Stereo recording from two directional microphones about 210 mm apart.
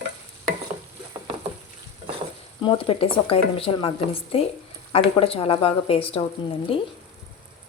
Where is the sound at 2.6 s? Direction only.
25° left (ahead or behind).